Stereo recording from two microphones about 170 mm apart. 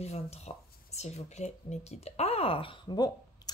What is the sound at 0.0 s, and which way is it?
Speech, 40° left (ahead or behind).